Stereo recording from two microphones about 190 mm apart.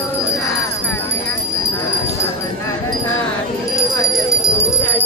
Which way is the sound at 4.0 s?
20° left (ahead or behind).